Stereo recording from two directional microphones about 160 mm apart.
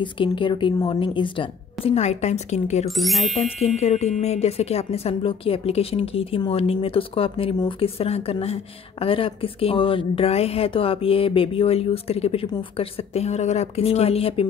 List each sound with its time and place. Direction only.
0.0 s speech: 30° left (ahead or behind)
2.9 s speech: centre (ahead or behind)
3.3 s speech: 45° left (ahead or behind)